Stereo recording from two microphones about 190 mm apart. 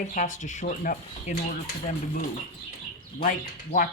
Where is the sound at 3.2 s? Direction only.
40° left (ahead or behind).